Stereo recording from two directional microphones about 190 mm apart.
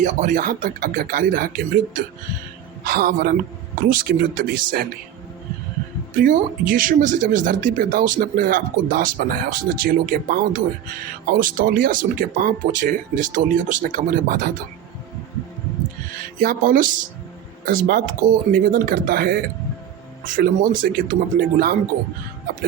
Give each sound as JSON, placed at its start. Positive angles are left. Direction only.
{"t": 0.0, "sound": "speech", "side_deg": -40}
{"t": 6.1, "sound": "speech", "side_deg": -45}
{"t": 16.4, "sound": "speech", "side_deg": -50}